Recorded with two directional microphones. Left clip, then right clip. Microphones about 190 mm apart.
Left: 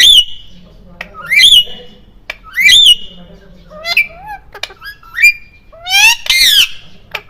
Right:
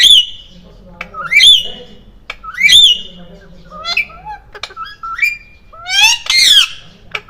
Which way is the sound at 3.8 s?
35° left (ahead or behind).